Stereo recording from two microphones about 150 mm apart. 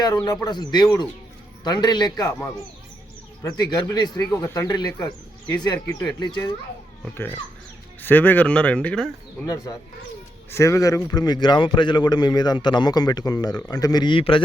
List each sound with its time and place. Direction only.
0.3 s a man's voice: 25° left (ahead or behind)
3.4 s a man's voice: 25° left (ahead or behind)
7.0 s speech: 15° left (ahead or behind)
10.5 s a man's voice: 20° left (ahead or behind); by 14.4 s 35° left (ahead or behind)